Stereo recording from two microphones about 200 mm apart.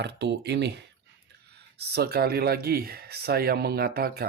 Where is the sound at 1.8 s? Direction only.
55° right (ahead or behind).